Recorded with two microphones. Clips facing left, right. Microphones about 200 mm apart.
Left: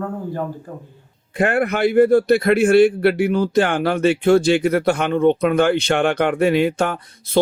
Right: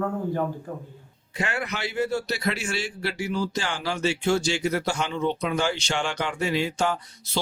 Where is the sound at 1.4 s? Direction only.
55° left (ahead or behind).